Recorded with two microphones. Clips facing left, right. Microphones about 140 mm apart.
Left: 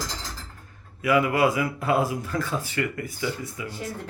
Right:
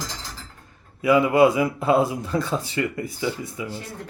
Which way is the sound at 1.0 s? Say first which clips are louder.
Right 5 dB; 25° right (ahead or behind).